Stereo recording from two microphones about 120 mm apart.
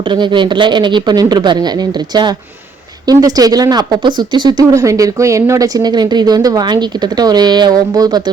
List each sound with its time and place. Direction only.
0.1 s speech: 40° right (ahead or behind)